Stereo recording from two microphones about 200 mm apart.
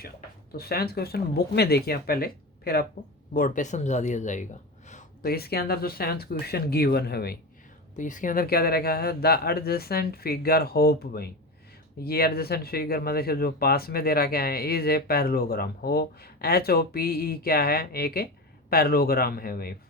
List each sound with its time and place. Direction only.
0.5 s speech: 50° left (ahead or behind)
7.9 s speech: 40° left (ahead or behind)